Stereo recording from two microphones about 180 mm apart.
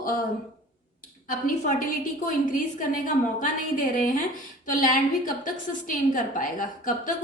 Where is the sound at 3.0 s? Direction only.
50° left (ahead or behind).